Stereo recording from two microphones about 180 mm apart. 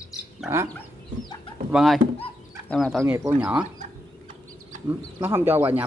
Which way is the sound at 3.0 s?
10° right (ahead or behind).